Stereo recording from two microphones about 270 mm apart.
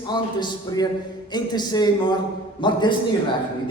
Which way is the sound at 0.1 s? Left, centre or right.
Centre.